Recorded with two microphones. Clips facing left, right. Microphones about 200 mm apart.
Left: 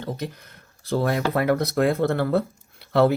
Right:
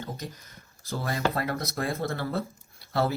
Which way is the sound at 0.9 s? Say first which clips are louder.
Left 6 dB; 65° left (ahead or behind).